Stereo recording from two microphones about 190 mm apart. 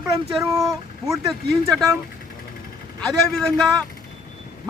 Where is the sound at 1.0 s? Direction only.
Centre (ahead or behind).